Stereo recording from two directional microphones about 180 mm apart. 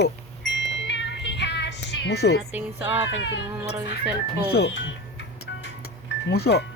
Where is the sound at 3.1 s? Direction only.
90° left.